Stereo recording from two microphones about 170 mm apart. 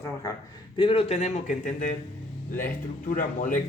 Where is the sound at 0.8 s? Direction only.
30° left (ahead or behind); by 3.6 s 50° left (ahead or behind).